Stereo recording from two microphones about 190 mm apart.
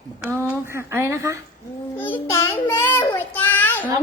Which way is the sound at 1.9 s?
10° left (ahead or behind).